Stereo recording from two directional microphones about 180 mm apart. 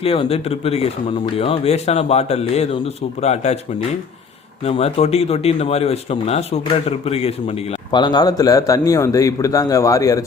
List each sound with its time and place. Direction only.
0.0 s speech: 30° left (ahead or behind)
4.6 s speech: 35° left (ahead or behind); by 10.2 s 20° left (ahead or behind)